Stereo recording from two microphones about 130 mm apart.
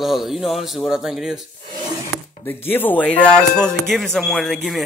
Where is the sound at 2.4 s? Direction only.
15° left (ahead or behind).